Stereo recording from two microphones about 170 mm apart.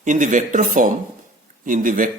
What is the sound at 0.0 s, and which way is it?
A man's voice, 50° right (ahead or behind).